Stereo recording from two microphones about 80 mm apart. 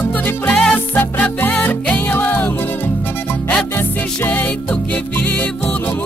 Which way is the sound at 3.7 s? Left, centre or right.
Left.